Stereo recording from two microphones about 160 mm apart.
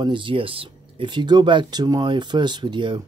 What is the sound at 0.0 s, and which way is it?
Speech, 30° right (ahead or behind).